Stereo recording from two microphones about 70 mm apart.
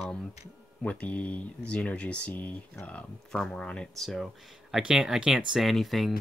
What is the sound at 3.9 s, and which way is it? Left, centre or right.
Speech, centre.